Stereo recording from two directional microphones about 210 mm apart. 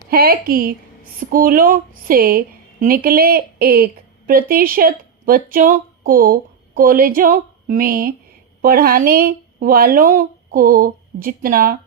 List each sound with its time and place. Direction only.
0.1 s speech: 45° right (ahead or behind)